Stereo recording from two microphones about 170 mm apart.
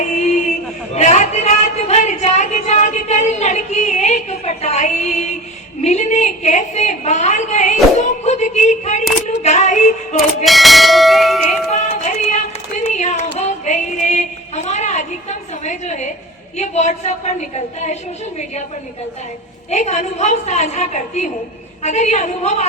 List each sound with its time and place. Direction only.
0.0 s a sound: 45° left (ahead or behind)
5.8 s a woman's voice: 45° left (ahead or behind)
8.2 s a sound: 45° left (ahead or behind)
9.2 s a woman's voice: 45° left (ahead or behind)
10.4 s speech: centre (ahead or behind)
11.7 s music: 40° left (ahead or behind)
12.8 s a sound: 45° left (ahead or behind)
15.6 s a woman's voice: 45° left (ahead or behind)
19.7 s a woman's voice: 45° left (ahead or behind)